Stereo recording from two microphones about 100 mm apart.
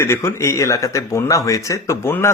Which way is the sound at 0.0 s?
25° left (ahead or behind).